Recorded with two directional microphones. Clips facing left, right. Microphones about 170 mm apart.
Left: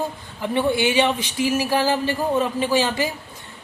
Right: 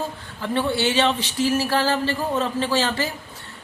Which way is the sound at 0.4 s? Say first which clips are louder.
Left 2 dB; 15° left (ahead or behind).